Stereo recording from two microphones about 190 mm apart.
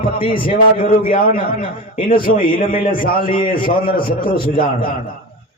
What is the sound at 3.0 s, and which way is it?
A man's voice, 50° left (ahead or behind).